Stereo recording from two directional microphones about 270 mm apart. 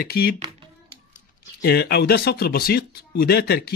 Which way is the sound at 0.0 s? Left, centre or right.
Left.